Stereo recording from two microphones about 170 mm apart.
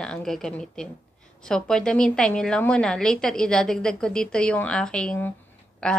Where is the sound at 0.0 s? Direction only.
5° left (ahead or behind).